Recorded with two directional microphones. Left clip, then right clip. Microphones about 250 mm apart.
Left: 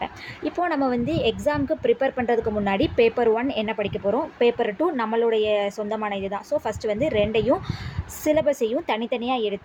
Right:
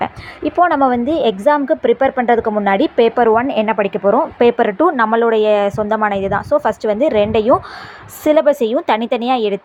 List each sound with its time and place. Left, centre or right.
0.0 s a woman's voice: centre